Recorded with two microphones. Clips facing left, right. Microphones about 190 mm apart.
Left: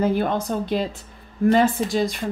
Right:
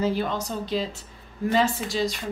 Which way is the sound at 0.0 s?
55° left (ahead or behind).